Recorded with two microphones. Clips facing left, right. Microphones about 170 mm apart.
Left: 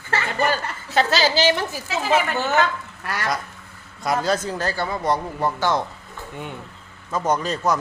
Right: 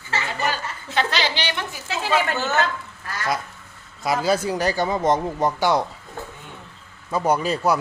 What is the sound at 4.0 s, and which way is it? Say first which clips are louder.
Speech: right 1 dB; 5° right (ahead or behind).